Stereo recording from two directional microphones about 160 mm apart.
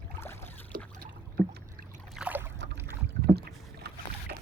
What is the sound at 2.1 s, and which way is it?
Boat, 10° right (ahead or behind).